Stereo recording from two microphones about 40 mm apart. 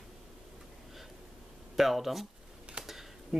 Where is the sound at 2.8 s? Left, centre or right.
Right.